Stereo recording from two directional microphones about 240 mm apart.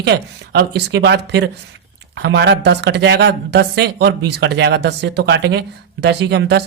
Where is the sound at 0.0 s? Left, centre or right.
Right.